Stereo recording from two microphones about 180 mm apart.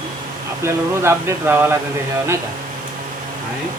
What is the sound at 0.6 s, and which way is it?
Speech, 15° right (ahead or behind).